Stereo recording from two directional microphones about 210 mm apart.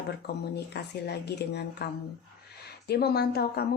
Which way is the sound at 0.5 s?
50° left (ahead or behind).